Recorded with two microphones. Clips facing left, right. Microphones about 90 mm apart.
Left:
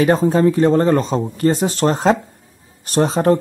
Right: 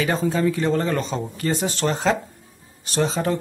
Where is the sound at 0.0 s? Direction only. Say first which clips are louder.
Left 7 dB; 40° left (ahead or behind).